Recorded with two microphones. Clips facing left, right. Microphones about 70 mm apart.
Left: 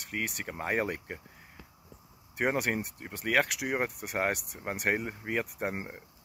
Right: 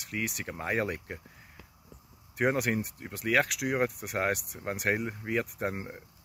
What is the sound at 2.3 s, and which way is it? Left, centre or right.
Speech, centre.